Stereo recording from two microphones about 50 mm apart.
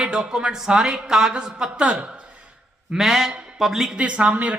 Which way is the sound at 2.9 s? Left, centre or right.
Centre.